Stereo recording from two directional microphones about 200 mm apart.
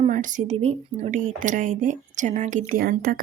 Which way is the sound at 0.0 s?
40° right (ahead or behind).